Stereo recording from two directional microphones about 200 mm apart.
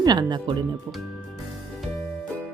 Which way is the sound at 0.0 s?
20° right (ahead or behind).